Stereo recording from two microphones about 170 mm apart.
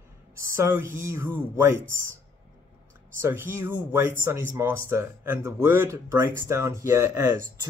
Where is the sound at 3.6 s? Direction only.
10° right (ahead or behind).